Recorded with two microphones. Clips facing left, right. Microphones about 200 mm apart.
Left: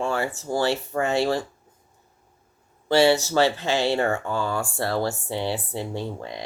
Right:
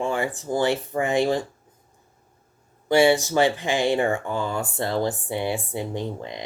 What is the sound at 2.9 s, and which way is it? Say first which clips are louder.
Speech: right 1 dB; 15° right (ahead or behind).